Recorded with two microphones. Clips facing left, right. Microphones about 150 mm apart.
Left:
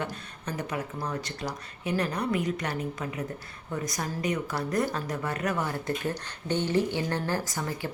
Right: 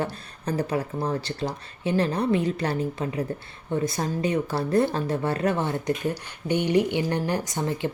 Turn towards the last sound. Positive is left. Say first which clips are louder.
# right 5 dB
turn(degrees=-25)  # may be behind; listen again after turning